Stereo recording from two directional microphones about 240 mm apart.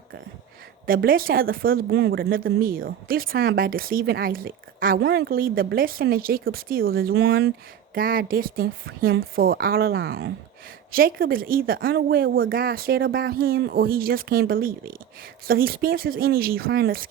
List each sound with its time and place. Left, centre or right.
0.9 s speech: right